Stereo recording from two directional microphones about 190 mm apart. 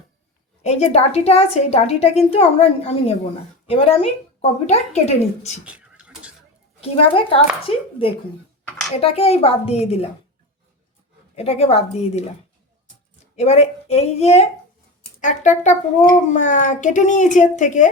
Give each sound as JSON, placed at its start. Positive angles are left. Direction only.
{"t": 0.6, "sound": "a woman's voice", "side_deg": 35}
{"t": 5.6, "sound": "a sound", "side_deg": -5}
{"t": 6.8, "sound": "a child's voice", "side_deg": 30}
{"t": 11.3, "sound": "a woman's voice", "side_deg": 35}
{"t": 13.3, "sound": "a woman's voice", "side_deg": 35}